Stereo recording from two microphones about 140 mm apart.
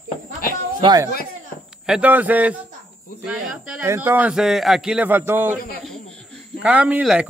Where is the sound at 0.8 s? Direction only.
30° right (ahead or behind).